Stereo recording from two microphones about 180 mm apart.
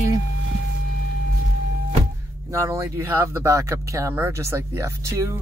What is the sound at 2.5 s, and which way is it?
Speech, 15° right (ahead or behind).